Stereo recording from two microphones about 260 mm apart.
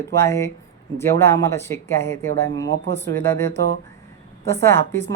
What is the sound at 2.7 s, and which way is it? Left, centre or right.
Speech, right.